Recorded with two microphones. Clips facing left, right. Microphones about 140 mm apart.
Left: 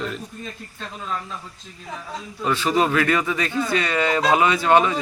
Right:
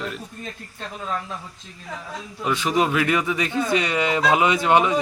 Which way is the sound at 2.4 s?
15° right (ahead or behind).